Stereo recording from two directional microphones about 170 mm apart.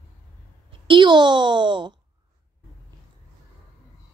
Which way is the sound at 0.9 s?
25° right (ahead or behind).